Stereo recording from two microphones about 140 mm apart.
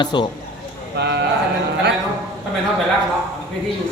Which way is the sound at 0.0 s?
35° left (ahead or behind).